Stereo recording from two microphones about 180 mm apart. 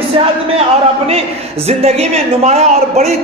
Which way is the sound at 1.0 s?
35° right (ahead or behind).